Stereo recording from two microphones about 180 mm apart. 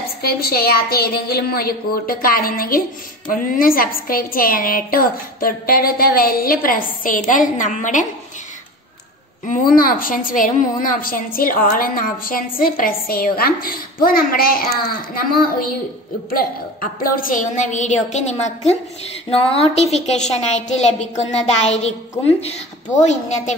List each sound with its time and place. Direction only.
0.2 s a woman's voice: 60° left (ahead or behind)
9.5 s a woman's voice: 50° left (ahead or behind)